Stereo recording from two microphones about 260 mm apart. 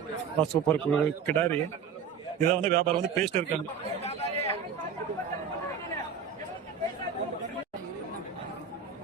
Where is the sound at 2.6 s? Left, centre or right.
Right.